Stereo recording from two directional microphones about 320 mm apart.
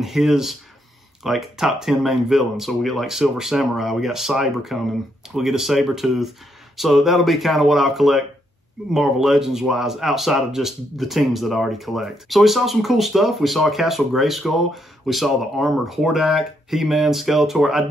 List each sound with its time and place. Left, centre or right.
0.0 s speech: centre